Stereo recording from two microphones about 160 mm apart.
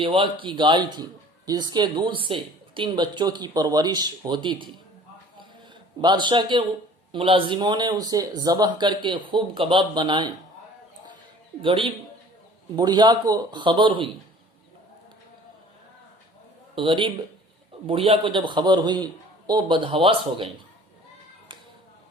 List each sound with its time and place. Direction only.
0.0 s a man's voice: 35° right (ahead or behind)
6.0 s speech: 30° right (ahead or behind)
11.6 s a man's voice: 30° right (ahead or behind)
16.7 s a man's voice: 30° right (ahead or behind)